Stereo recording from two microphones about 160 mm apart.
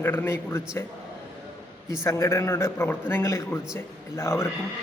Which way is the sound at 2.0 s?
20° left (ahead or behind).